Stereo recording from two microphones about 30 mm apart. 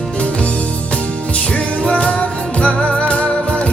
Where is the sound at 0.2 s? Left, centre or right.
Left.